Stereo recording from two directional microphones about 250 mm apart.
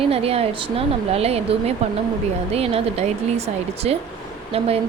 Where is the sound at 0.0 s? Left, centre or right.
Right.